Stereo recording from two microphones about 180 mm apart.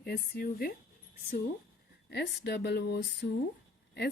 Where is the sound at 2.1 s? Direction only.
65° left (ahead or behind).